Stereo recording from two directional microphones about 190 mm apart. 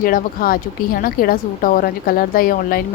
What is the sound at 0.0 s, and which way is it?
A woman's voice, 50° left (ahead or behind).